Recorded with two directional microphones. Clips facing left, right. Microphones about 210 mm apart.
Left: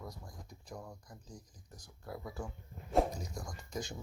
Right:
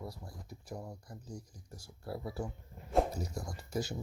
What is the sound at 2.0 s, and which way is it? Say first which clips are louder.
Speech: right 4 dB; 30° right (ahead or behind).